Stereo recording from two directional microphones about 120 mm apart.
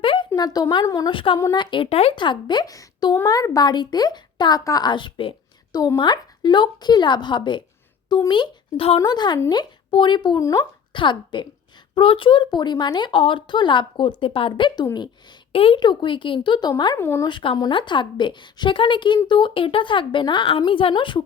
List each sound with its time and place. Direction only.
0.0 s a sound: 45° left (ahead or behind)
0.3 s speech: 35° left (ahead or behind)
1.1 s a woman's voice: 45° left (ahead or behind)
2.1 s speech: 40° left (ahead or behind)
5.7 s a woman's voice: 30° left (ahead or behind)
17.0 s speech: 20° left (ahead or behind)
17.2 s a woman's voice: 40° left (ahead or behind)